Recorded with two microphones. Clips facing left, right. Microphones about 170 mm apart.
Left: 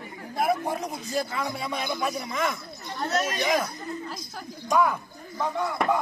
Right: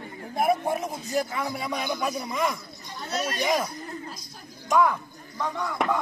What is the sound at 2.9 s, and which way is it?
Speech, 50° left (ahead or behind).